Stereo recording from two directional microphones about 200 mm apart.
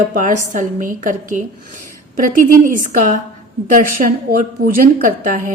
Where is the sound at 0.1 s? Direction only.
40° right (ahead or behind).